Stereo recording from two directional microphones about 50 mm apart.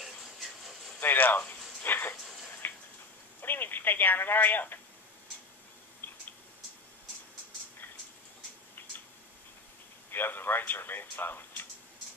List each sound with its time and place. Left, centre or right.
0.0 s a sound: centre
1.0 s speech: left
1.8 s a sound: left
2.6 s tick-tock: left
3.3 s speech: left
10.1 s a man's voice: left